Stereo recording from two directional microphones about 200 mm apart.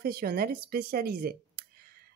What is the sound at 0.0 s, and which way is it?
Speech, 50° right (ahead or behind).